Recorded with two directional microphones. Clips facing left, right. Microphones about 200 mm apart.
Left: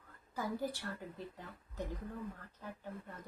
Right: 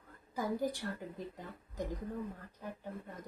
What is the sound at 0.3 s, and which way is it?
A woman's voice, 15° right (ahead or behind).